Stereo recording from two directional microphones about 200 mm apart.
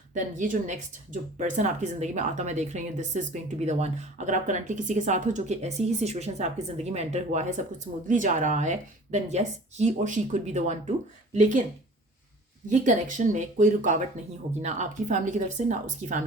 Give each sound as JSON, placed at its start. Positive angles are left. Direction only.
{"t": 0.1, "sound": "speech", "side_deg": -40}
{"t": 12.6, "sound": "speech", "side_deg": -35}